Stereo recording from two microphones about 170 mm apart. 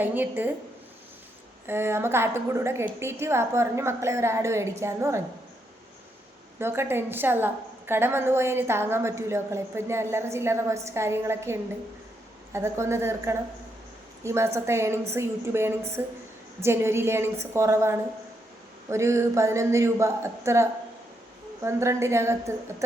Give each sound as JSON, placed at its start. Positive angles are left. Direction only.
{"t": 0.0, "sound": "a woman's voice", "side_deg": -10}
{"t": 1.6, "sound": "a woman's voice", "side_deg": -15}
{"t": 6.6, "sound": "a woman's voice", "side_deg": -15}